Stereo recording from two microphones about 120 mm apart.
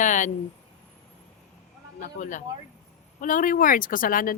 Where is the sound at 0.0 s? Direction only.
90° left.